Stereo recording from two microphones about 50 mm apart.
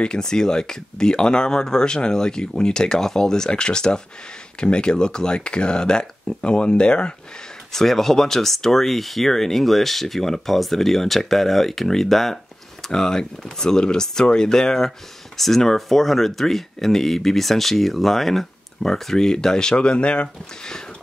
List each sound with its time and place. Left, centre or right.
0.0 s speech: centre
7.7 s speech: centre